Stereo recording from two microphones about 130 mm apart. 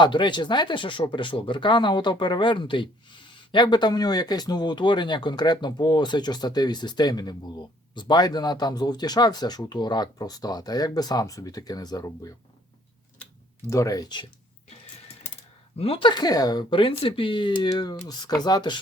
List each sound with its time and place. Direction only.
0.0 s speech: 35° left (ahead or behind)
13.7 s speech: 25° left (ahead or behind)
15.8 s speech: 45° left (ahead or behind)